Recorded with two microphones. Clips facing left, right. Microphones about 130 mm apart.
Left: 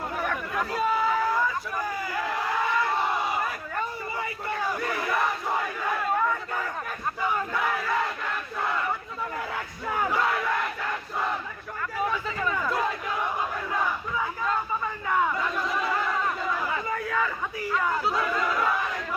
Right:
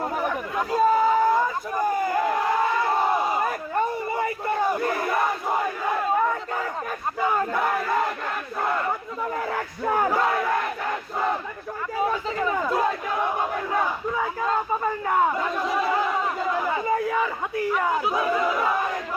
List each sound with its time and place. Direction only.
0.2 s chatter: 20° right (ahead or behind)
0.8 s chatter: 40° right (ahead or behind)
1.8 s crowd: 50° right (ahead or behind)
3.3 s crowd: 35° right (ahead or behind)
4.7 s battle cry: 25° right (ahead or behind)
7.3 s battle cry: 40° right (ahead or behind)
9.9 s battle cry: 40° right (ahead or behind)
11.9 s a sound: 25° right (ahead or behind)
15.0 s battle cry: 40° right (ahead or behind)
16.0 s a sound: 20° right (ahead or behind)
17.8 s battle cry: 15° right (ahead or behind)